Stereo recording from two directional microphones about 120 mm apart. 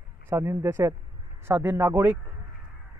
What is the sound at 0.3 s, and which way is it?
Speech, 20° right (ahead or behind).